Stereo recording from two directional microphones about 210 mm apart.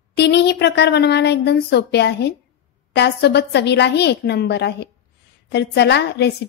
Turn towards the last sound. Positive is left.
turn(degrees=55)  # may be behind; listen again after turning